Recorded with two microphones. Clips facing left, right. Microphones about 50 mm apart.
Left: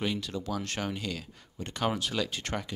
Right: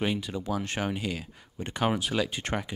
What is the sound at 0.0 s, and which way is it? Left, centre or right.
Speech, centre.